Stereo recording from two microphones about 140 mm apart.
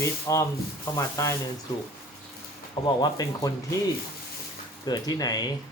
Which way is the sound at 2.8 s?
30° left (ahead or behind).